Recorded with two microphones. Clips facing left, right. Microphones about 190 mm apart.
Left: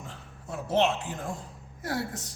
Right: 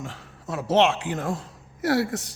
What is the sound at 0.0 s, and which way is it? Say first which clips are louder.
A woman's voice: right 7 dB; 90° right.